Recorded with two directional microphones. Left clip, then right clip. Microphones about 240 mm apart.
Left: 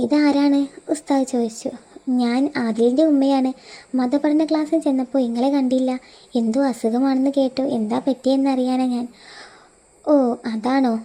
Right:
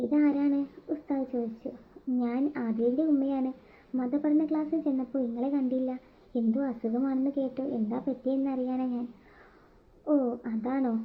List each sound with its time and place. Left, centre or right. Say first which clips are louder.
0.1 s a woman's voice: left 9 dB; left